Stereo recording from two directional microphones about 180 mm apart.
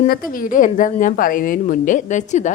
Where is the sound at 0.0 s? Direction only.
50° left (ahead or behind).